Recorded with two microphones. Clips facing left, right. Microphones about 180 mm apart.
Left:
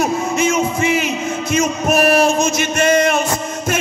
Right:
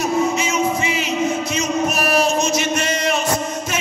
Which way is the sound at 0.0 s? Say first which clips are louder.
Left 2 dB; 50° left (ahead or behind).